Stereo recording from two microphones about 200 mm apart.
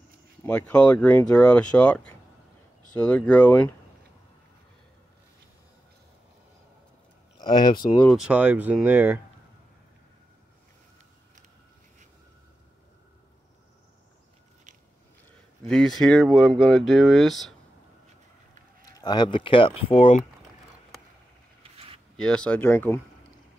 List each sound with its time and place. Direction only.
0.4 s speech: 5° left (ahead or behind)
7.3 s speech: 20° left (ahead or behind)
8.0 s speech: centre (ahead or behind)
15.7 s speech: centre (ahead or behind)
18.9 s speech: 20° left (ahead or behind)
22.1 s speech: 5° left (ahead or behind)